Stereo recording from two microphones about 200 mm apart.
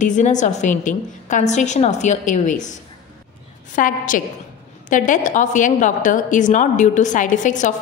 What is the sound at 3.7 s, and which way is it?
A woman's voice, 40° left (ahead or behind).